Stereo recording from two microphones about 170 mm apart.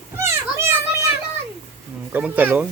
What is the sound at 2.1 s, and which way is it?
Speech, 10° right (ahead or behind).